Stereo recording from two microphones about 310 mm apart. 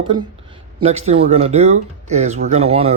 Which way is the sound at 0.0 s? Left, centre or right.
Centre.